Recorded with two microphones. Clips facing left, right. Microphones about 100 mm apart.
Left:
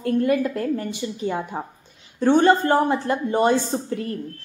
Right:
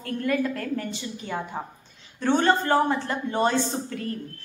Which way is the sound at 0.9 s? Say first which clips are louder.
Left 6 dB; 15° left (ahead or behind).